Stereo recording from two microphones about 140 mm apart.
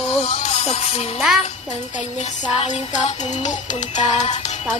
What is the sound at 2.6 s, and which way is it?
Music, 55° left (ahead or behind).